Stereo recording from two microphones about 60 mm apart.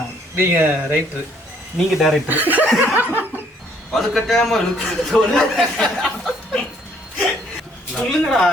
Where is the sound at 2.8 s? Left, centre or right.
Right.